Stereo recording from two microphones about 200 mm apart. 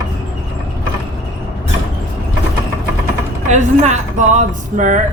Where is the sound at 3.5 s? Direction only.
35° right (ahead or behind).